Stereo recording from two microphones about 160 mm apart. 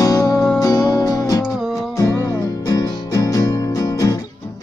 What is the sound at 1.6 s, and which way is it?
Music, centre (ahead or behind).